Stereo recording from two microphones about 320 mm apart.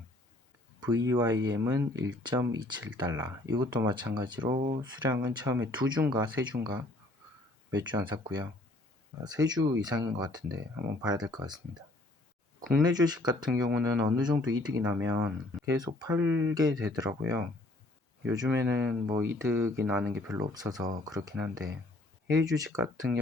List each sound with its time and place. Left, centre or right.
0.8 s speech: centre
4.5 s speech: right
4.8 s speech: centre
7.7 s speech: centre
9.2 s speech: centre
12.8 s speech: centre